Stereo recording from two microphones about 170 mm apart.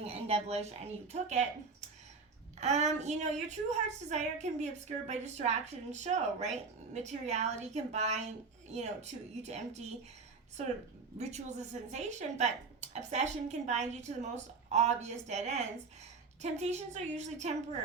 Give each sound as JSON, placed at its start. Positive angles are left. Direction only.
{"t": 0.0, "sound": "a woman's voice", "side_deg": -35}
{"t": 2.6, "sound": "a woman's voice", "side_deg": -40}
{"t": 11.2, "sound": "a woman's voice", "side_deg": -40}